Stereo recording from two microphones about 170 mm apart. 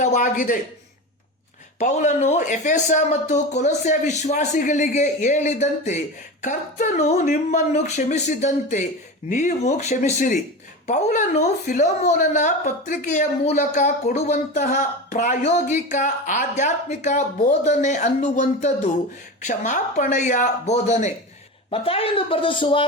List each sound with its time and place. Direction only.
0.0 s speech: 45° left (ahead or behind)
1.8 s speech: 45° left (ahead or behind)